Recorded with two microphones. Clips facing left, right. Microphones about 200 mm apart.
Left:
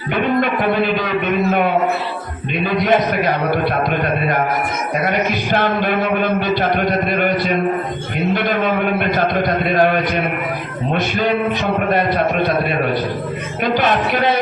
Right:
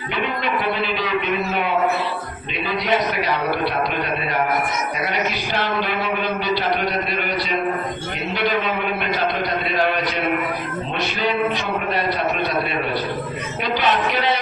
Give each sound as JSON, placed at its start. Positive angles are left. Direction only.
{"t": 0.2, "sound": "a sound", "side_deg": 50}
{"t": 2.6, "sound": "a man's voice", "side_deg": 50}
{"t": 5.0, "sound": "a man's voice", "side_deg": 50}
{"t": 13.7, "sound": "a man's voice", "side_deg": 50}